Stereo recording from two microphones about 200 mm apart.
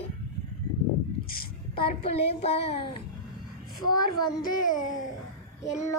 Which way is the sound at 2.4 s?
30° left (ahead or behind).